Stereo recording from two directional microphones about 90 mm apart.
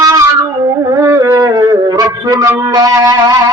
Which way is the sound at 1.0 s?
30° right (ahead or behind).